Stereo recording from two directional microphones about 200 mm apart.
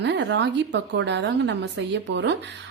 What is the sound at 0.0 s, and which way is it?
A woman's voice, 60° right (ahead or behind).